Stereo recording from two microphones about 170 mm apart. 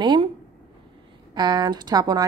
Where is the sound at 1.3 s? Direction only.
25° right (ahead or behind).